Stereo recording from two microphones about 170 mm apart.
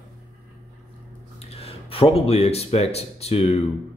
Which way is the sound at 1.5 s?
35° left (ahead or behind).